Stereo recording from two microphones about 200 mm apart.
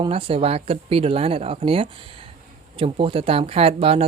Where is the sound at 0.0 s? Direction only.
30° right (ahead or behind).